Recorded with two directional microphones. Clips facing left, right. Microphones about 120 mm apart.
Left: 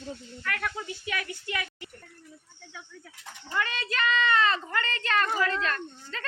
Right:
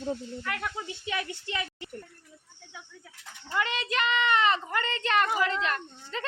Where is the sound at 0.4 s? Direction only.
20° right (ahead or behind).